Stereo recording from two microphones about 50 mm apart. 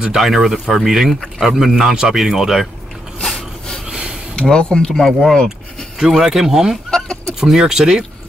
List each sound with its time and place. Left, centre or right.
0.2 s speech: centre
3.2 s a sound: centre
3.8 s a sound: centre
4.4 s speech: centre
5.0 s speech: centre
5.9 s speech: centre